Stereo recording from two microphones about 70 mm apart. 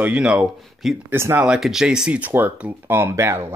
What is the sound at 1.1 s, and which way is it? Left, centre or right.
Speech, right.